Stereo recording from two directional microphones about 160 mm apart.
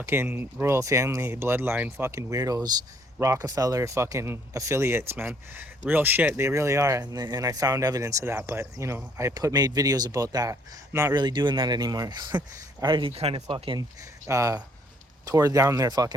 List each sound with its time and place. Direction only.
0.0 s speech: 15° right (ahead or behind); by 13.8 s 30° right (ahead or behind)
14.3 s speech: 20° right (ahead or behind)